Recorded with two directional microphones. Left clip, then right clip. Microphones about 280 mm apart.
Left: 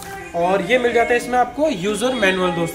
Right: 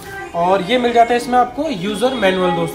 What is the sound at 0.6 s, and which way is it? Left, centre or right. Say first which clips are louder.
Speech: right 3 dB; right.